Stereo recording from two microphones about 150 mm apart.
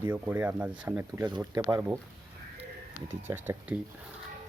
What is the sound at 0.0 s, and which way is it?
Speech, 15° right (ahead or behind).